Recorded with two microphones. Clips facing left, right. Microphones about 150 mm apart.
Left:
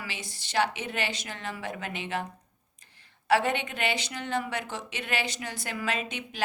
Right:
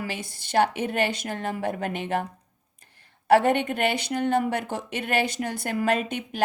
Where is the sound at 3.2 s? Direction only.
55° right (ahead or behind).